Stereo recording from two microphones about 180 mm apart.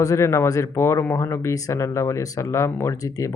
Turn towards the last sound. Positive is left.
turn(degrees=20)  # may be behind; listen again after turning